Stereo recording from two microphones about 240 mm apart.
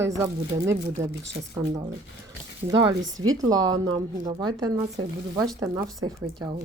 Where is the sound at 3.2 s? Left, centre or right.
Centre.